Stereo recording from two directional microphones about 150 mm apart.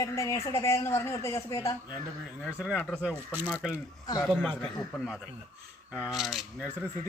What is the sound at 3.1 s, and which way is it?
Speech, 15° right (ahead or behind).